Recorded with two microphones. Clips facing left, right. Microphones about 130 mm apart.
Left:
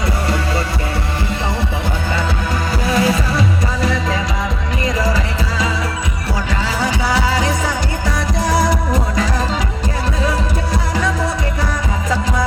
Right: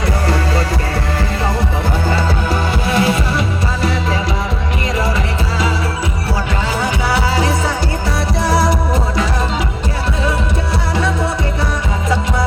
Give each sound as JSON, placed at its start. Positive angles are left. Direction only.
{"t": 2.8, "sound": "music", "side_deg": -30}
{"t": 6.8, "sound": "music", "side_deg": -30}